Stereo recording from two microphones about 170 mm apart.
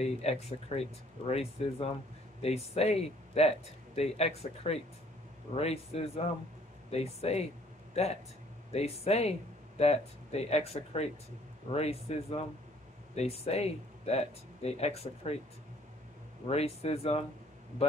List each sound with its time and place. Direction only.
0.0 s speech: 40° left (ahead or behind)
16.4 s speech: 40° left (ahead or behind)